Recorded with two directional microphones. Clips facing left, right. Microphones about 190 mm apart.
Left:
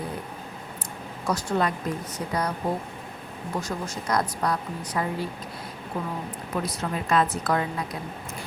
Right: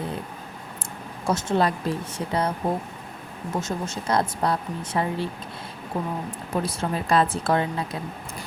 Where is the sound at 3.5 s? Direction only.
25° right (ahead or behind).